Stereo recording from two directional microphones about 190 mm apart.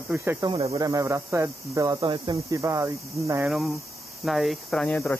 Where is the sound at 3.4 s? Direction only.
Centre (ahead or behind).